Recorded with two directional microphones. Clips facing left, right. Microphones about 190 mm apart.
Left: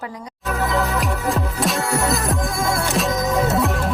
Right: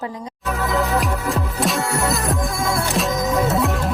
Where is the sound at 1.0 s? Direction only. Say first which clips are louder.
Even; centre (ahead or behind).